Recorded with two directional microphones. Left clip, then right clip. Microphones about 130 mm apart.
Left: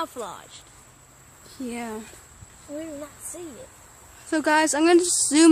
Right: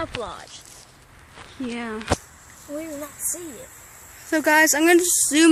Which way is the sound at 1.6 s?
20° right (ahead or behind).